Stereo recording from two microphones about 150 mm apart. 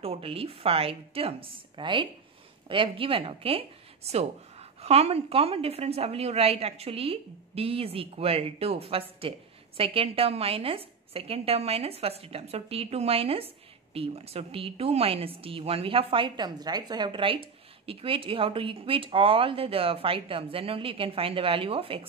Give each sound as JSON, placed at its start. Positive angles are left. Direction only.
{"t": 0.0, "sound": "a woman's voice", "side_deg": -40}